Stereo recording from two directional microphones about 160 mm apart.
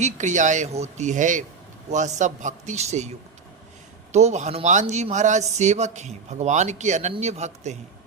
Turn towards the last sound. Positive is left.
turn(degrees=-45)  # may be behind; listen again after turning